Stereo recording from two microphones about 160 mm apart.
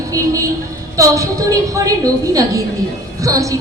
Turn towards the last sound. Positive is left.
turn(degrees=-20)  # may be behind; listen again after turning